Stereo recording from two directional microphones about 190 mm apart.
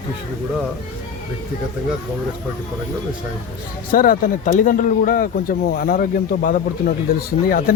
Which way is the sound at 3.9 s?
50° left (ahead or behind).